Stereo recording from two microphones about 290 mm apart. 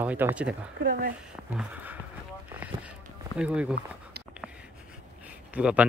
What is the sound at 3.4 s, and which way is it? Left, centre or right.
Speech, centre.